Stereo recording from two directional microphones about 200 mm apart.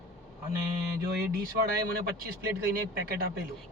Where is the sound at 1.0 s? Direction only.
50° right (ahead or behind).